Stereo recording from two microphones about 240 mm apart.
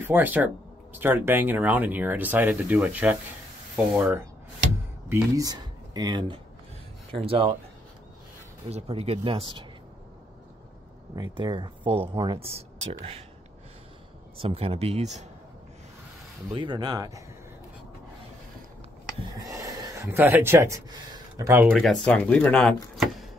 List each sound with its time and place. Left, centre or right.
0.0 s speech: centre; by 7.5 s right
8.6 s speech: right
11.1 s speech: centre
14.3 s speech: right
16.4 s speech: centre
19.3 s speech: centre
21.7 s speech: centre